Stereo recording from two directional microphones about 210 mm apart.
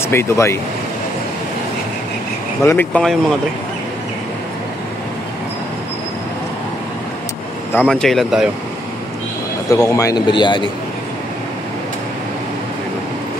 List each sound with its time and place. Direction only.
0.1 s speech: 10° left (ahead or behind)
2.6 s speech: 10° left (ahead or behind)
7.7 s speech: 5° left (ahead or behind)
9.7 s a man's voice: 15° left (ahead or behind)